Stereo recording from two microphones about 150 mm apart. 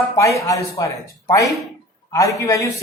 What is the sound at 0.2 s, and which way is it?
Speech, 20° left (ahead or behind).